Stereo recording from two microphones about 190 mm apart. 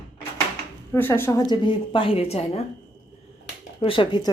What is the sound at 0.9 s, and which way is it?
A woman's voice, 10° left (ahead or behind).